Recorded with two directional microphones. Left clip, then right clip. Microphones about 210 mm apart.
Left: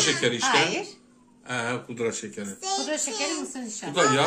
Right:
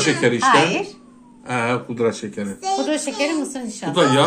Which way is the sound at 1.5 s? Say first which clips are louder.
Right 8 dB; 5° left (ahead or behind).